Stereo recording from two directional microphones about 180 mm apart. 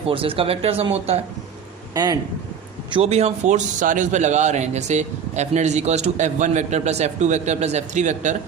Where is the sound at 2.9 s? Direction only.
35° right (ahead or behind).